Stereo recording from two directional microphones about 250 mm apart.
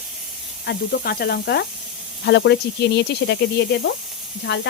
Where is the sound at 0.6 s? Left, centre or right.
Left.